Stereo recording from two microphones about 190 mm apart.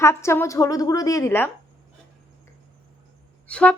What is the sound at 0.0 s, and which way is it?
Speech, 15° left (ahead or behind).